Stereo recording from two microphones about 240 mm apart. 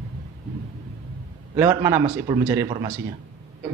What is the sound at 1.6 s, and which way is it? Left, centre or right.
Speech, centre.